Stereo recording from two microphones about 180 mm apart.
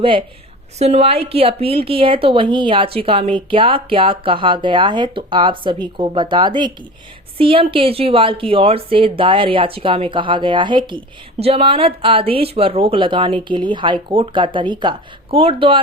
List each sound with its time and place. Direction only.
0.0 s speech: 30° right (ahead or behind)